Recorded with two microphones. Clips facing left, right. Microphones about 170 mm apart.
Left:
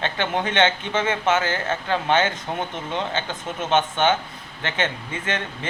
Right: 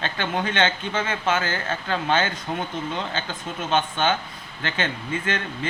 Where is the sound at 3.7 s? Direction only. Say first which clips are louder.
Left 3 dB; 20° left (ahead or behind).